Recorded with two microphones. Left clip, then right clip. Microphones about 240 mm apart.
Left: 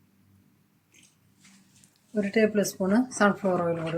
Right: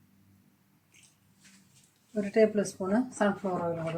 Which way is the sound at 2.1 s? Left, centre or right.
Left.